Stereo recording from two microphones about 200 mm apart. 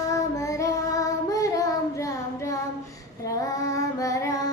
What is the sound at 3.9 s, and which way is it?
Child singing, 15° left (ahead or behind).